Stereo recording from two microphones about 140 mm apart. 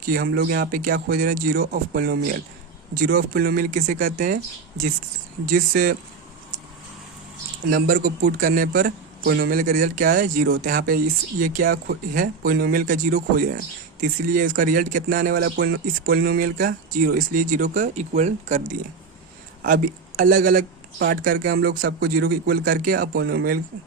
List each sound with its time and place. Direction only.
0.1 s speech: 90° right; by 4.4 s 65° right (ahead or behind)
5.5 s speech: 90° right
7.7 s speech: 90° right
14.0 s speech: 80° right; by 18.8 s 55° right (ahead or behind)
19.6 s speech: 80° right